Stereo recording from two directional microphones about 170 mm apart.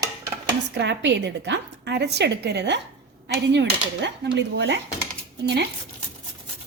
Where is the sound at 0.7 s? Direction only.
90° right.